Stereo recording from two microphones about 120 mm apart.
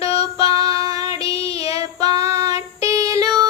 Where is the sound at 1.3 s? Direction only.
55° left (ahead or behind).